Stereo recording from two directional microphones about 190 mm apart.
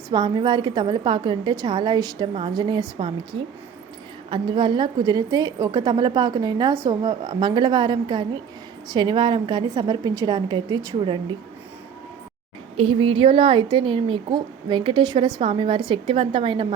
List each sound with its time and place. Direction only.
0.1 s a woman's voice: 20° right (ahead or behind)
12.7 s a woman's voice: 30° right (ahead or behind)